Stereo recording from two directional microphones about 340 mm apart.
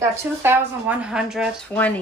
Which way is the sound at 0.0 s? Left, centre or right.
Centre.